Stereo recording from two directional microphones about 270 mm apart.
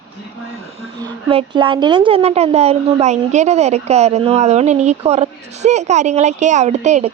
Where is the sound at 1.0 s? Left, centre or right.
Centre.